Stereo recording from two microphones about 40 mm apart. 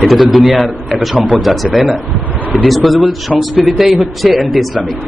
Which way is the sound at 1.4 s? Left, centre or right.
Centre.